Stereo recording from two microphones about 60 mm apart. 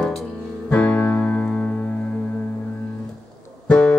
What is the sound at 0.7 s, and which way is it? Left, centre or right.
Music, centre.